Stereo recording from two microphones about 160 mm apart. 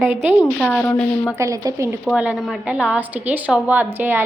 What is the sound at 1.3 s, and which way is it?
Speech, 20° right (ahead or behind).